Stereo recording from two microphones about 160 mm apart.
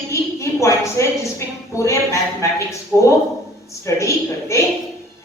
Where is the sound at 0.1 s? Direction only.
20° left (ahead or behind).